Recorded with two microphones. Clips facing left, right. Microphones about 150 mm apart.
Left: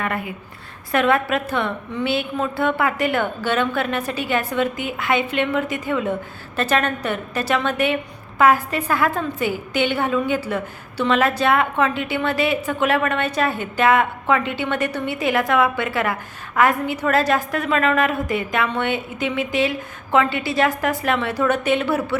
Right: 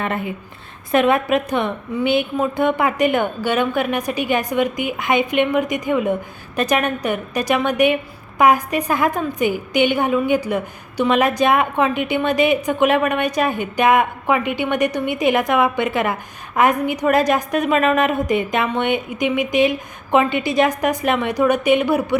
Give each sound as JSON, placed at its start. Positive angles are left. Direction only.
{"t": 0.0, "sound": "a woman's voice", "side_deg": -25}